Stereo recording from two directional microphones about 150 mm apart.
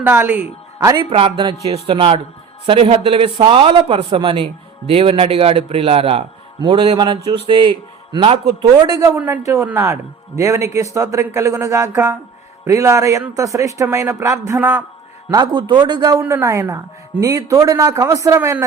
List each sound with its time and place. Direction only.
0.0 s speech: 15° right (ahead or behind)
0.8 s a man's voice: 25° right (ahead or behind)
8.9 s speech: 20° right (ahead or behind)
15.3 s speech: 30° right (ahead or behind)
16.2 s speech: 15° right (ahead or behind)